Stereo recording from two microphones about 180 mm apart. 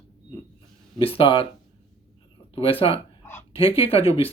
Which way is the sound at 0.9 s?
30° left (ahead or behind).